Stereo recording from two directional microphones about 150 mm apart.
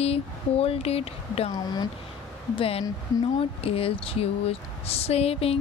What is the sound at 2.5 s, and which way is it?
Speech, 40° left (ahead or behind).